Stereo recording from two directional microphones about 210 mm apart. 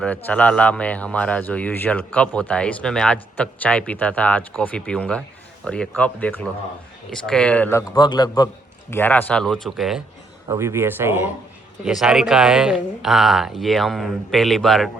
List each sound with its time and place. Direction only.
0.3 s a man's voice: 5° left (ahead or behind)
10.5 s a man's voice: 10° right (ahead or behind)